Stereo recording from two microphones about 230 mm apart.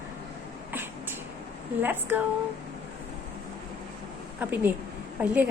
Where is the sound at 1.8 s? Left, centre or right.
Centre.